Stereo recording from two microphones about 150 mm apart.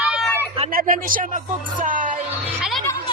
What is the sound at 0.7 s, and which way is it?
Speech, 70° right (ahead or behind).